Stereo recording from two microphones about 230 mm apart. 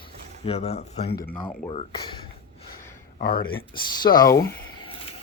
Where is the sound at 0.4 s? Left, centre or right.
Left.